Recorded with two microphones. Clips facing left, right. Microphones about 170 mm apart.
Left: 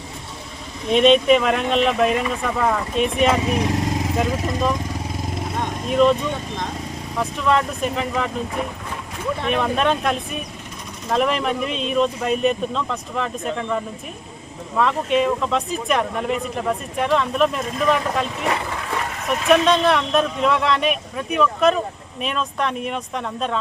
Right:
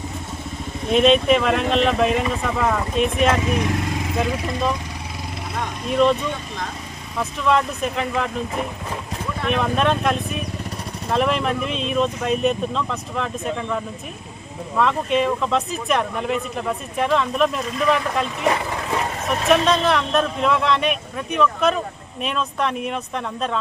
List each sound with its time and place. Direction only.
0.9 s speech: centre (ahead or behind)
4.3 s speech: 40° left (ahead or behind)
5.9 s speech: centre (ahead or behind)
7.2 s speech: centre (ahead or behind)
9.5 s speech: centre (ahead or behind)
14.8 s speech: centre (ahead or behind)
19.5 s speech: centre (ahead or behind)